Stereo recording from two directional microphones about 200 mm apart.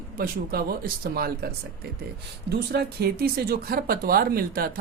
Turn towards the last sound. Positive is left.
turn(degrees=-45)  # may be behind; listen again after turning